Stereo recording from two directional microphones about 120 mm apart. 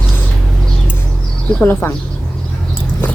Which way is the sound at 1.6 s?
15° left (ahead or behind).